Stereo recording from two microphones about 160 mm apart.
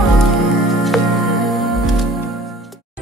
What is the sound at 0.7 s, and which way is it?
Music, centre (ahead or behind).